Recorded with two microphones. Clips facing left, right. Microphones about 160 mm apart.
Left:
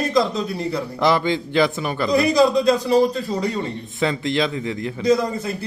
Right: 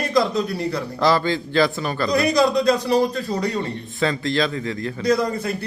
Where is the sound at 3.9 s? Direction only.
20° left (ahead or behind).